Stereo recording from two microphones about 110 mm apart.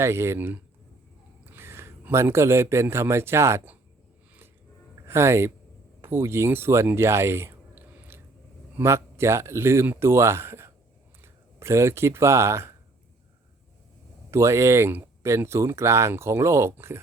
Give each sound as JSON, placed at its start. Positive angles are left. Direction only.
{"t": 0.0, "sound": "a man's voice", "side_deg": -25}
{"t": 5.0, "sound": "speech", "side_deg": -25}
{"t": 14.3, "sound": "speech", "side_deg": -25}